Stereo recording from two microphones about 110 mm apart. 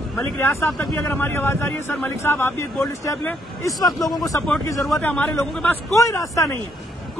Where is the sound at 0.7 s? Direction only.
Centre (ahead or behind).